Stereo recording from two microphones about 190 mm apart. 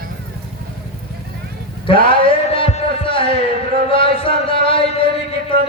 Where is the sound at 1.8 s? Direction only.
25° left (ahead or behind).